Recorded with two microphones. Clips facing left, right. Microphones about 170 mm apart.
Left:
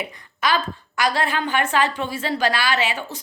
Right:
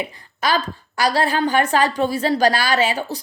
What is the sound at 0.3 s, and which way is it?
A woman's voice, 35° right (ahead or behind).